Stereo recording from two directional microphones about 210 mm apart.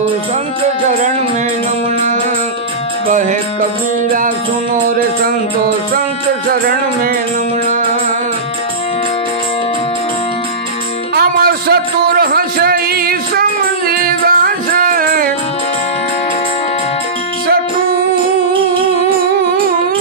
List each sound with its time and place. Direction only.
0.8 s music: 35° right (ahead or behind)
3.1 s music: 35° right (ahead or behind)
11.1 s a sound: 50° right (ahead or behind)